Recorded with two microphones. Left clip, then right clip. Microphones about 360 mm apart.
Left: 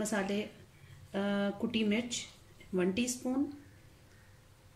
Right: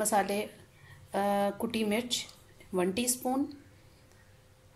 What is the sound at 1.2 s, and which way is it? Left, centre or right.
Speech, right.